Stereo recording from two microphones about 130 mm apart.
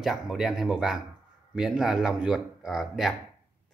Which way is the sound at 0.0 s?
Centre (ahead or behind).